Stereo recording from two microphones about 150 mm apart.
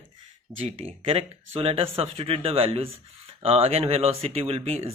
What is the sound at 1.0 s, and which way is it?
Speech, 40° right (ahead or behind).